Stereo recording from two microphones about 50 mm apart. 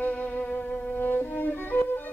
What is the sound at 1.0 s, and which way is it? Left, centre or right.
Violin, left.